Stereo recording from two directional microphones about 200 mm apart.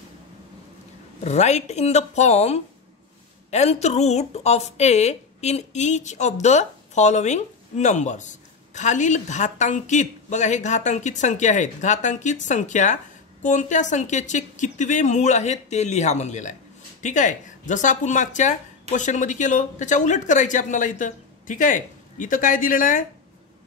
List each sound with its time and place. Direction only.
1.2 s speech: 35° left (ahead or behind)